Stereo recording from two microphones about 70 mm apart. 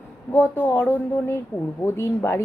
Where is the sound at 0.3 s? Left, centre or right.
Left.